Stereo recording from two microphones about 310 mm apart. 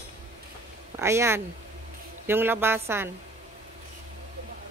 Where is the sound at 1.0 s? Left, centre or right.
Centre.